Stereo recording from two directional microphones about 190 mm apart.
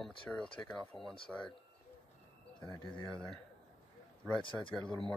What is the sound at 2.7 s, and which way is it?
Speech, 20° left (ahead or behind).